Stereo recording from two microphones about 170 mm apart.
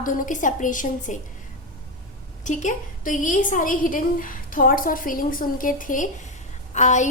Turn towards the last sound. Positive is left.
turn(degrees=45)  # may be behind; listen again after turning